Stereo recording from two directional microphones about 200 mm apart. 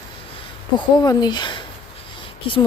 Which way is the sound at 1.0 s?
20° left (ahead or behind).